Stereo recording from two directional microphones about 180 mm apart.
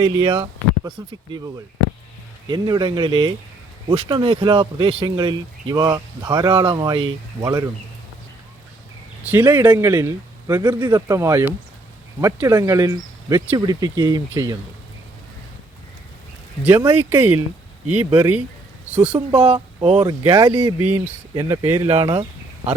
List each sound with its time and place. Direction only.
0.0 s speech: 25° right (ahead or behind)
2.5 s speech: 25° right (ahead or behind)
9.2 s speech: 10° right (ahead or behind)
16.6 s speech: 15° right (ahead or behind)
19.5 s speech: 30° right (ahead or behind)
20.1 s speech: 20° right (ahead or behind)
21.0 s speech: 15° right (ahead or behind)
21.8 s speech: 30° right (ahead or behind)